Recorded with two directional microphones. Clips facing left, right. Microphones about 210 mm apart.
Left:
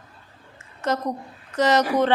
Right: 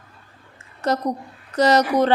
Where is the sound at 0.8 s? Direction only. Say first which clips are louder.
Right 3 dB; 35° right (ahead or behind).